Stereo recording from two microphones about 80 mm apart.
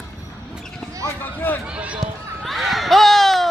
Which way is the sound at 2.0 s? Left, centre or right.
Centre.